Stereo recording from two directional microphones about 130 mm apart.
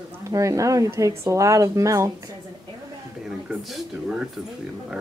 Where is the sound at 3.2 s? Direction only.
5° right (ahead or behind).